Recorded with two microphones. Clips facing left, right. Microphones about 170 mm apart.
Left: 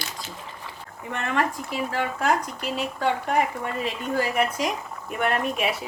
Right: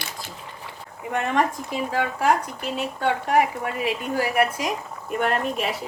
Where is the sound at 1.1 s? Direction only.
15° right (ahead or behind).